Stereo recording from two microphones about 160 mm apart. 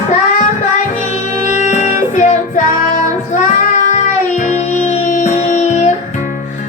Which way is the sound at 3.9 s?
50° left (ahead or behind).